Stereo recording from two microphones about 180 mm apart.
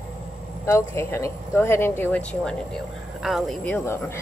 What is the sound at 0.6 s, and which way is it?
A woman's voice, 15° left (ahead or behind).